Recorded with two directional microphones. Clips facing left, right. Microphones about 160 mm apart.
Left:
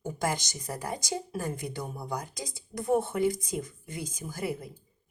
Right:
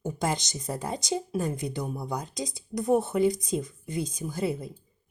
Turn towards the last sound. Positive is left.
turn(degrees=-25)  # may be behind; listen again after turning